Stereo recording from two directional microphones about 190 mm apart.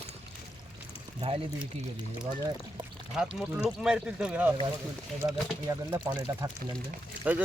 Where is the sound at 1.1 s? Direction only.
30° right (ahead or behind).